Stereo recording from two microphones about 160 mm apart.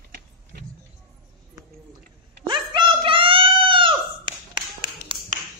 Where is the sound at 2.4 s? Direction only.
30° right (ahead or behind).